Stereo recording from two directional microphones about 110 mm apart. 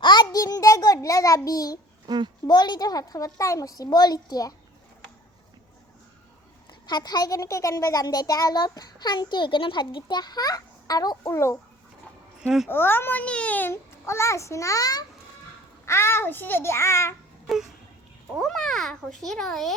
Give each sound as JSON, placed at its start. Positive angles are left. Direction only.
{"t": 0.0, "sound": "a sound", "side_deg": 40}
{"t": 2.0, "sound": "a child's voice", "side_deg": -40}
{"t": 2.5, "sound": "a child's voice", "side_deg": 40}
{"t": 6.7, "sound": "a child's voice", "side_deg": 40}
{"t": 12.6, "sound": "a child's voice", "side_deg": 20}
{"t": 15.9, "sound": "a child's voice", "side_deg": 25}
{"t": 17.4, "sound": "a sound", "side_deg": -5}
{"t": 18.3, "sound": "a child's voice", "side_deg": 5}